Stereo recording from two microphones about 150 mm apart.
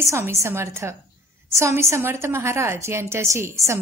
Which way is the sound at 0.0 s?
20° right (ahead or behind).